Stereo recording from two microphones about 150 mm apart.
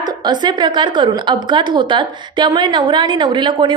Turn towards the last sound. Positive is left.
turn(degrees=-30)  # may be behind; listen again after turning